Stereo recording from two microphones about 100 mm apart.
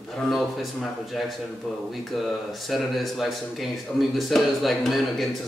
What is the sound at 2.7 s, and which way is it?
A man's voice, centre (ahead or behind).